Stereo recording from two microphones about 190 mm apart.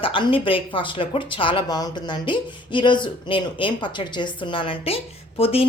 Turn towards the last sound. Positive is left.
turn(degrees=30)  # may be behind; listen again after turning